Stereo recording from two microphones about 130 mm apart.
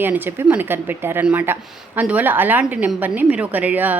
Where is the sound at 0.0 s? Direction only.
15° right (ahead or behind).